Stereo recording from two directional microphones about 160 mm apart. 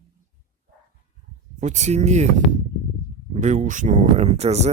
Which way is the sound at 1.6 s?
45° right (ahead or behind).